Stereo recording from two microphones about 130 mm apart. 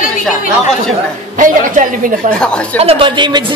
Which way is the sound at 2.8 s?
45° right (ahead or behind).